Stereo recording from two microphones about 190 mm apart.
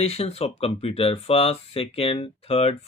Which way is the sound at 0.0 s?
35° left (ahead or behind).